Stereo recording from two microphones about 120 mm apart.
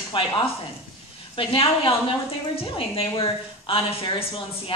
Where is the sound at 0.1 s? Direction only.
45° left (ahead or behind).